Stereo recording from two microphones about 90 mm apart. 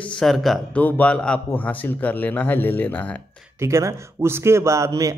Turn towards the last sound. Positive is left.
turn(degrees=-40)  # may be behind; listen again after turning